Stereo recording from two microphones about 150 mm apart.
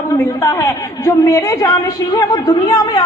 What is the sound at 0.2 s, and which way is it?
A woman's voice, 15° left (ahead or behind).